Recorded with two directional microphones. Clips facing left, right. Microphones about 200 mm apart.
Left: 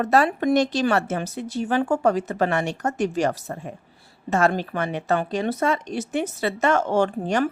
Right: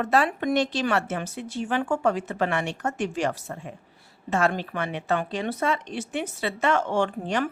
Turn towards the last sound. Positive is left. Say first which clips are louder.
# left 4 dB
turn(degrees=45)  # may be behind; listen again after turning